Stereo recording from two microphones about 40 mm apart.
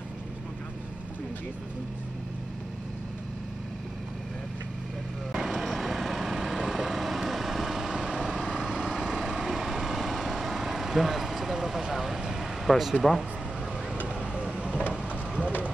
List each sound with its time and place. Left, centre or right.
5.3 s vehicle: centre
12.6 s speech: centre
14.0 s vehicle: right